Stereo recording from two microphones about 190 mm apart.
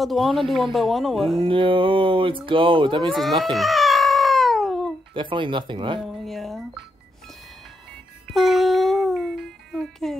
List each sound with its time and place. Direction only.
0.0 s speech: centre (ahead or behind)
1.4 s speech: 25° right (ahead or behind)
3.1 s baby cry: centre (ahead or behind)
5.1 s speech: 25° right (ahead or behind)
6.0 s a sound: centre (ahead or behind)
8.3 s music: centre (ahead or behind)